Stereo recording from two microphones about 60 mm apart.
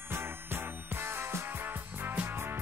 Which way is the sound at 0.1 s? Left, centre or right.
Right.